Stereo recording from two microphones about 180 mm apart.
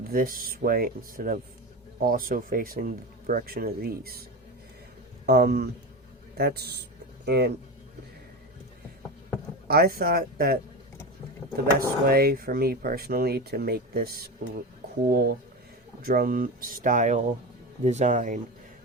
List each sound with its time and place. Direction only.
0.1 s speech: 50° right (ahead or behind); by 7.5 s 65° right (ahead or behind)
9.6 s speech: 55° right (ahead or behind)
11.6 s speech: 55° right (ahead or behind)